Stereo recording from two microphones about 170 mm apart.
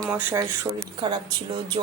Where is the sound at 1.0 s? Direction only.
25° right (ahead or behind).